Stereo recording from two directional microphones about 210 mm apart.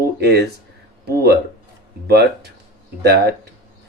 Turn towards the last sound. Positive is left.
turn(degrees=-50)  # may be behind; listen again after turning